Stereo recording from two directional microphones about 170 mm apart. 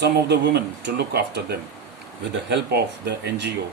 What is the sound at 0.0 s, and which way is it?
Speech, 75° right (ahead or behind).